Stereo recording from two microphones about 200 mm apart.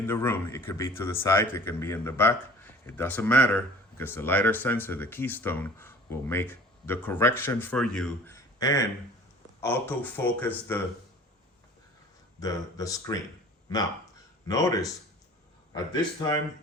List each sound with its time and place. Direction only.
0.0 s a man's voice: 10° left (ahead or behind)
8.4 s a sound: 15° left (ahead or behind)
9.6 s a man's voice: 10° left (ahead or behind)
12.4 s a man's voice: 20° left (ahead or behind)